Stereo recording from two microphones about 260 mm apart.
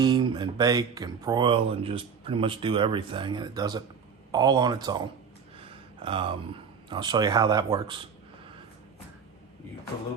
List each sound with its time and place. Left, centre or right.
0.0 s speech: centre